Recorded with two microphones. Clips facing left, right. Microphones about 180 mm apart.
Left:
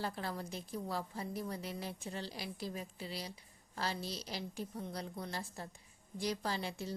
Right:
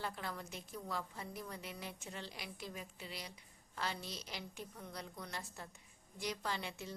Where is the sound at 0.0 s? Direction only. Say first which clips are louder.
Left 4 dB; 35° left (ahead or behind).